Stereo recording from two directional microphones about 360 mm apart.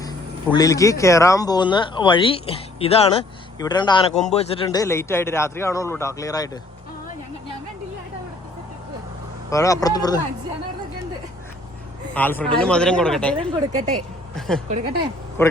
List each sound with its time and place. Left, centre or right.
0.0 s speech: centre
9.5 s speech: centre
12.1 s speech: centre
13.3 s speech: centre
14.3 s speech: centre